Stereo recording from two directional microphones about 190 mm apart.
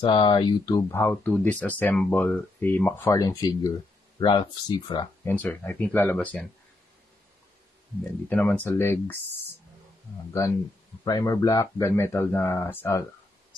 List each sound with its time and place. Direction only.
0.0 s speech: 25° left (ahead or behind)
5.2 s speech: 10° left (ahead or behind)
8.3 s speech: 10° left (ahead or behind)
10.4 s speech: 15° left (ahead or behind)